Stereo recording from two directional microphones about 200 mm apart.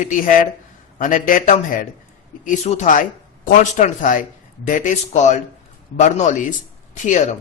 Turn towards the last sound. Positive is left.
turn(degrees=35)  # may be behind; listen again after turning